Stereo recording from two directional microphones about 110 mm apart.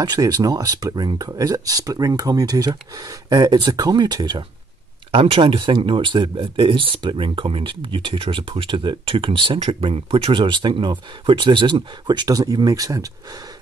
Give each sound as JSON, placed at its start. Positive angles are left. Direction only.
{"t": 0.0, "sound": "speech", "side_deg": -35}
{"t": 5.1, "sound": "speech", "side_deg": -55}